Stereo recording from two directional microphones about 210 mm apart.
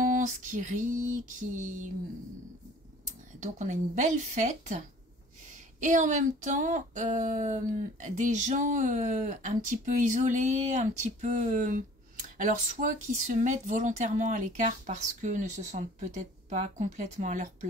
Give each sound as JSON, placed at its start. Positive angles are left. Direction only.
{"t": 0.0, "sound": "speech", "side_deg": -35}
{"t": 3.3, "sound": "speech", "side_deg": -35}